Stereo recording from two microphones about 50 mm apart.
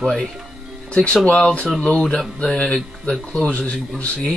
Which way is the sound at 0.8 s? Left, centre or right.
Left.